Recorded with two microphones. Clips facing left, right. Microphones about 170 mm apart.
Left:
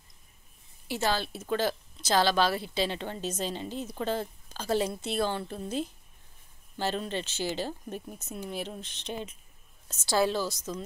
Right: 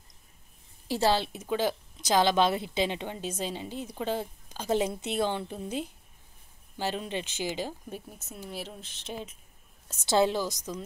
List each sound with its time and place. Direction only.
0.8 s a woman's voice: 35° right (ahead or behind)
1.2 s speech: 15° right (ahead or behind)
10.0 s speech: 20° right (ahead or behind)